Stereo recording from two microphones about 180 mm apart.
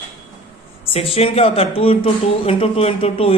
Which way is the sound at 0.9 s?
35° left (ahead or behind).